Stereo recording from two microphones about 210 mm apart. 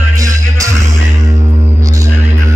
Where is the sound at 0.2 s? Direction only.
15° right (ahead or behind).